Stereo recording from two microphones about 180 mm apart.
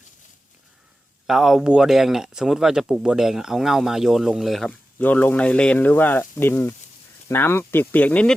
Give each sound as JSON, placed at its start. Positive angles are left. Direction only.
{"t": 1.3, "sound": "speech", "side_deg": 0}